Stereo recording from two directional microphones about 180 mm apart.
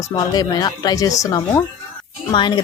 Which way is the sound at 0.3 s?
20° left (ahead or behind).